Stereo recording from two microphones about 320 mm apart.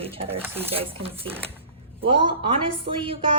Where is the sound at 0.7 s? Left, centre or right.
Centre.